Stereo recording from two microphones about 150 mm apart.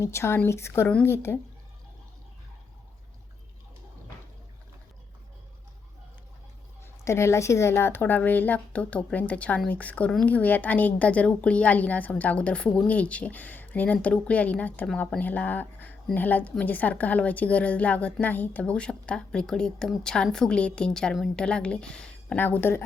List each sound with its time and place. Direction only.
0.0 s a woman's voice: 20° left (ahead or behind)
7.0 s a woman's voice: 20° left (ahead or behind)